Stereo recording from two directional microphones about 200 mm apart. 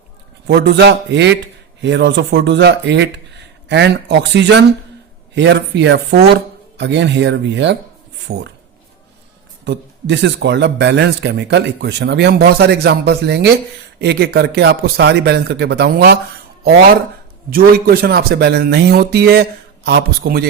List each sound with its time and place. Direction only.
0.4 s speech: 55° right (ahead or behind)
9.6 s speech: 60° right (ahead or behind)
17.5 s speech: 50° right (ahead or behind)